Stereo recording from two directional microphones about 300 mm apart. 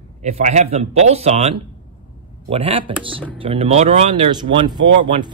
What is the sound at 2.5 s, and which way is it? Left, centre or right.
A man's voice, centre.